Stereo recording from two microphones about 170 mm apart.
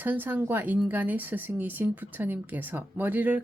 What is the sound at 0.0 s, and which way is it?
Speech, 10° right (ahead or behind).